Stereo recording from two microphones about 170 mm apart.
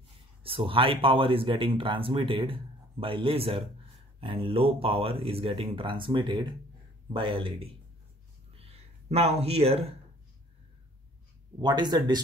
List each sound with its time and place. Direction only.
0.4 s speech: 35° right (ahead or behind)
8.5 s a sound: 35° right (ahead or behind)
11.6 s speech: 25° right (ahead or behind)